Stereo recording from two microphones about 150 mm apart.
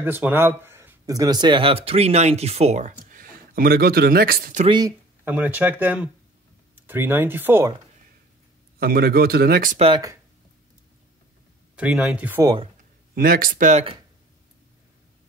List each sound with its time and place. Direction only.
0.0 s speech: 15° right (ahead or behind); by 4.6 s 80° right
4.6 s speech: 30° right (ahead or behind)
5.2 s speech: 10° right (ahead or behind)
8.7 s speech: 90° right
9.8 s speech: 35° right (ahead or behind)
11.7 s speech: 5° right (ahead or behind)
13.1 s speech: 70° right (ahead or behind)